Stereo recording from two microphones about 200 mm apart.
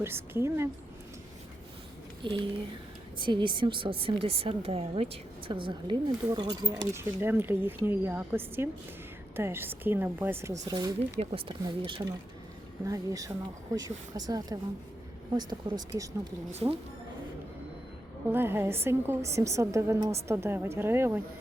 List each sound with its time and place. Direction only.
0.0 s speech: 10° right (ahead or behind)
2.2 s a woman's voice: 25° right (ahead or behind)
12.8 s a woman's voice: 15° right (ahead or behind)
18.3 s speech: 10° right (ahead or behind)